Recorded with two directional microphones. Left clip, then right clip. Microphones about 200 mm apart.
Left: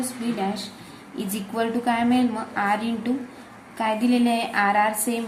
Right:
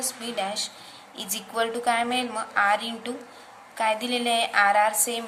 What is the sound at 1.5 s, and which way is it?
A woman's voice, 20° right (ahead or behind).